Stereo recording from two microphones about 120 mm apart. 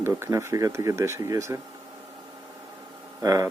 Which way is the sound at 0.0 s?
20° right (ahead or behind).